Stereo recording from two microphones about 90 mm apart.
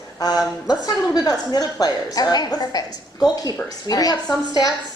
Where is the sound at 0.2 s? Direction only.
45° left (ahead or behind).